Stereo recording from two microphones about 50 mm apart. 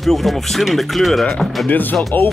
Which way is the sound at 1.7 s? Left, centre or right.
Left.